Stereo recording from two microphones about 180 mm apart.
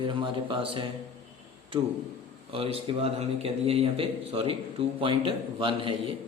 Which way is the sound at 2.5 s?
30° right (ahead or behind).